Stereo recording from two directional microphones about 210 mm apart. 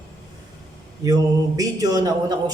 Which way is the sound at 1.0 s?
15° right (ahead or behind).